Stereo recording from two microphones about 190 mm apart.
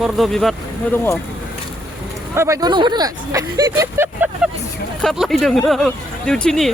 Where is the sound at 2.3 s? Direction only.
15° right (ahead or behind).